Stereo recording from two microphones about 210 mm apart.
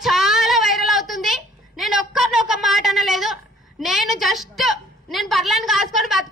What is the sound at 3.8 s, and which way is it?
A woman's voice, centre (ahead or behind).